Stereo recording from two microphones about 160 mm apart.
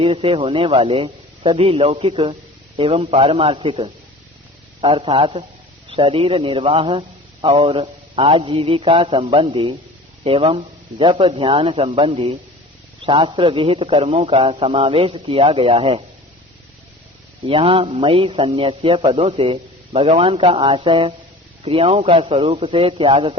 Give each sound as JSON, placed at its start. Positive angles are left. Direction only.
{"t": 0.0, "sound": "a man's voice", "side_deg": -35}
{"t": 17.4, "sound": "a man's voice", "side_deg": -35}